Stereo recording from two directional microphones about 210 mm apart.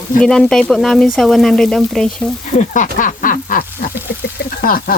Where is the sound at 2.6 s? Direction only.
35° left (ahead or behind).